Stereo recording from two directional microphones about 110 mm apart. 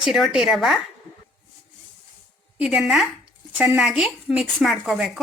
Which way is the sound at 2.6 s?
5° right (ahead or behind).